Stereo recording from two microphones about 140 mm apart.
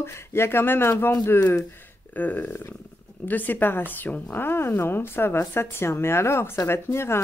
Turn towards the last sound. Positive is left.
turn(degrees=20)  # may be behind; listen again after turning